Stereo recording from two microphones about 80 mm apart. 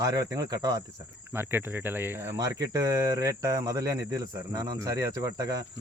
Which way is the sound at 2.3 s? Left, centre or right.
Right.